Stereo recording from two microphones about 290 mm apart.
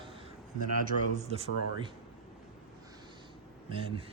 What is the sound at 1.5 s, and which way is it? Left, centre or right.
Speech, left.